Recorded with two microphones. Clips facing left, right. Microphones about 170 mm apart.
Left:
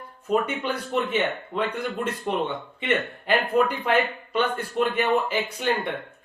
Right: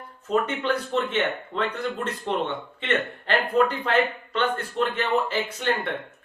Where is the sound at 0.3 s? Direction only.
10° left (ahead or behind).